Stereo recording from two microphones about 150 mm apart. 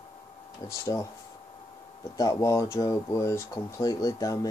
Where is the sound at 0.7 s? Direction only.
20° left (ahead or behind).